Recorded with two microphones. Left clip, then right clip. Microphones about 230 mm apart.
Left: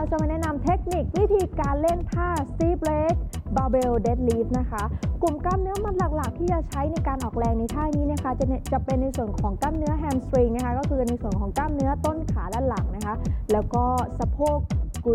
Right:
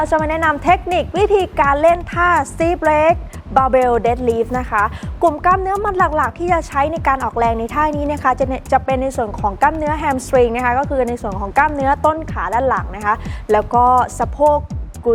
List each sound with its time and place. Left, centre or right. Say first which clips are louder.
0.0 s speech: right 12 dB; centre